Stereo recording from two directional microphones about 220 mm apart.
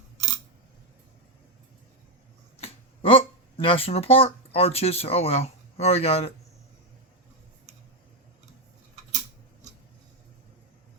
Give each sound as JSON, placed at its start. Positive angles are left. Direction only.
{"t": 2.6, "sound": "speech", "side_deg": 25}